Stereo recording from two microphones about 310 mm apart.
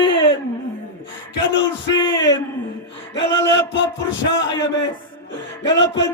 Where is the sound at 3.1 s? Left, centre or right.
Left.